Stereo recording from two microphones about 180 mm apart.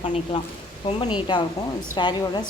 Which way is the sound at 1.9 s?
25° left (ahead or behind).